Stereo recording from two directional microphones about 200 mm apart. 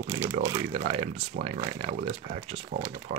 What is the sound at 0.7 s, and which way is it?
Speech, 35° right (ahead or behind).